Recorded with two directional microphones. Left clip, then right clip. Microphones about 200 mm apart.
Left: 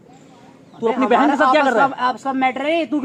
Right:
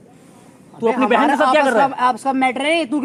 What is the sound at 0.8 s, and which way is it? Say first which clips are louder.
Speech: right 1 dB; 50° right (ahead or behind).